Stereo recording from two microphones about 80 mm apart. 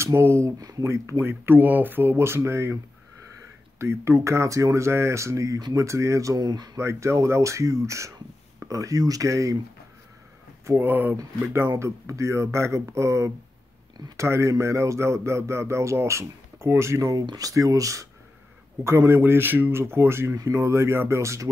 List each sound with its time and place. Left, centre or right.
0.0 s speech: right
0.6 s speech: right
0.8 s speech: right
1.2 s speech: right
3.8 s speech: right
6.4 s speech: right
6.8 s speech: right
10.7 s speech: right